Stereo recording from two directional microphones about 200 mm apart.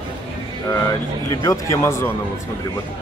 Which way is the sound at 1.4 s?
15° left (ahead or behind).